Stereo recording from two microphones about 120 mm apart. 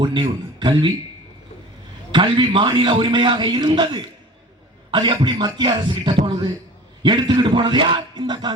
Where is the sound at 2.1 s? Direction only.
40° right (ahead or behind).